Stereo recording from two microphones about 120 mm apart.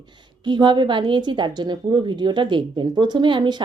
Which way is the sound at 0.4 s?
40° right (ahead or behind).